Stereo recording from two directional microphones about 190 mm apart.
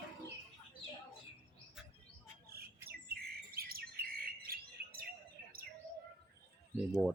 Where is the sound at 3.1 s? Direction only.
55° right (ahead or behind).